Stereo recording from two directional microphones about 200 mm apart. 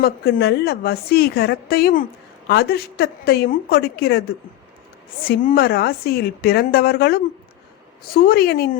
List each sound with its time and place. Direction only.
0.0 s a woman's voice: 55° left (ahead or behind)